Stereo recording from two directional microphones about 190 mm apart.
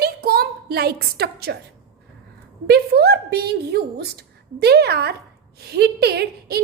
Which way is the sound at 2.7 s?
60° right (ahead or behind).